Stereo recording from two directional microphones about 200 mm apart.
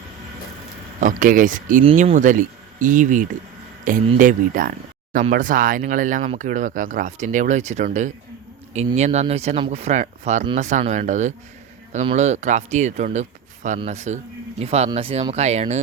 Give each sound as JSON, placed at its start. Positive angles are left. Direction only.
{"t": 0.9, "sound": "speech", "side_deg": -40}